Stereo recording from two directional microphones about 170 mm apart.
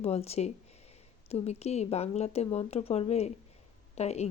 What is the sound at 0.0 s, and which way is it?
Speech, 40° left (ahead or behind).